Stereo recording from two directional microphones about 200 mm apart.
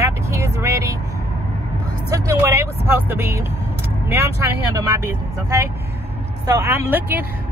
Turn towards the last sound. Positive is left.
turn(degrees=-10)  # may be behind; listen again after turning